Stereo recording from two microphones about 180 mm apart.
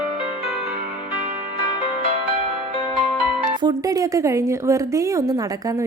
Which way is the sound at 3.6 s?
20° right (ahead or behind).